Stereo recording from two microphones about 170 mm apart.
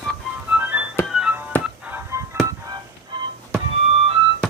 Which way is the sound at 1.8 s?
15° right (ahead or behind).